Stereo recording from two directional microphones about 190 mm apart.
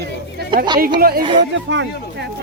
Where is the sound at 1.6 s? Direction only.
75° right (ahead or behind).